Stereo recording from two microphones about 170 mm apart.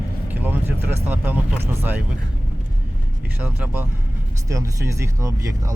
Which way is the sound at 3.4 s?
10° right (ahead or behind).